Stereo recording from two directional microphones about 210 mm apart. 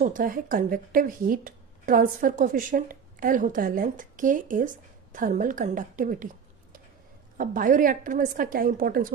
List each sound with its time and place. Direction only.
0.0 s speech: 40° right (ahead or behind)
7.3 s speech: 40° right (ahead or behind)